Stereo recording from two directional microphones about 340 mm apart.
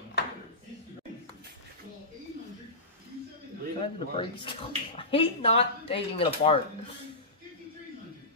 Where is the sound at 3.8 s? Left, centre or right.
Centre.